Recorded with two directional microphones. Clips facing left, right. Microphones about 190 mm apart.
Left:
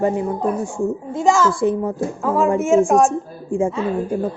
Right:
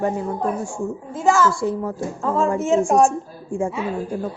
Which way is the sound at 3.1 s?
20° left (ahead or behind).